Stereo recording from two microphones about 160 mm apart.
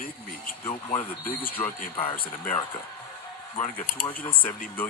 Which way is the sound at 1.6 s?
45° left (ahead or behind).